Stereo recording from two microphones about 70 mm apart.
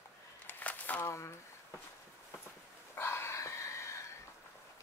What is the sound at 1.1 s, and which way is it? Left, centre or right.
Speech, left.